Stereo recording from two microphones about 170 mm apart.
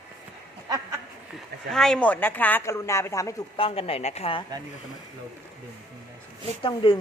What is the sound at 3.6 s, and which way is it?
Speech, 35° left (ahead or behind).